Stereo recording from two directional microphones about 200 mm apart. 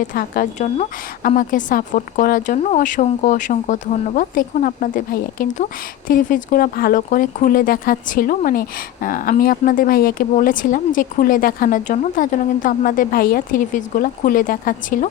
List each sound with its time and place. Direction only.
0.1 s speech: 45° left (ahead or behind)